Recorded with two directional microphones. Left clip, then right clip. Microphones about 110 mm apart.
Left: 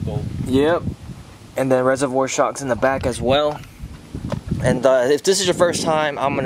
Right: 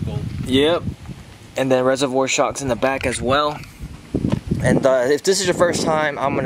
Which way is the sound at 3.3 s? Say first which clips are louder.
Left 1 dB; 10° right (ahead or behind).